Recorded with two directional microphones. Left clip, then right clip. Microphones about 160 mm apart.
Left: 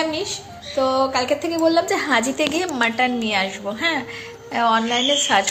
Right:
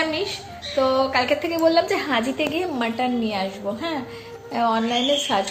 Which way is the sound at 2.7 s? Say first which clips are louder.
Left 4 dB; 5° left (ahead or behind).